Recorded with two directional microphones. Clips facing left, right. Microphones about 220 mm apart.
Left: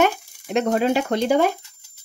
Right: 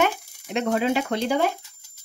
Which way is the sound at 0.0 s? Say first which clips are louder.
Left 4 dB; 45° left (ahead or behind).